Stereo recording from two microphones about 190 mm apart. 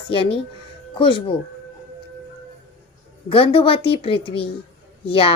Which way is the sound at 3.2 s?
25° left (ahead or behind).